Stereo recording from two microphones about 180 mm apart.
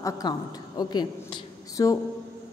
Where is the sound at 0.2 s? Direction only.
25° left (ahead or behind).